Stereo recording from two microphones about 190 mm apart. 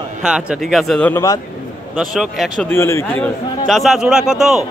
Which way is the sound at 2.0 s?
Centre (ahead or behind).